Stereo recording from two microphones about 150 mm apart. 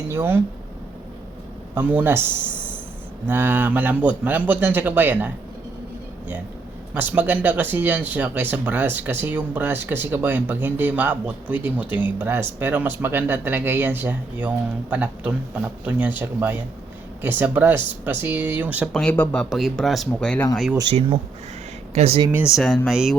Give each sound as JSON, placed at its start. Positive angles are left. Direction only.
{"t": 0.1, "sound": "speech", "side_deg": -15}
{"t": 1.7, "sound": "speech", "side_deg": -10}
{"t": 6.9, "sound": "speech", "side_deg": -10}
{"t": 18.9, "sound": "speech", "side_deg": 10}
{"t": 21.9, "sound": "speech", "side_deg": -40}
{"t": 22.3, "sound": "speech", "side_deg": -10}
{"t": 22.5, "sound": "speech", "side_deg": 5}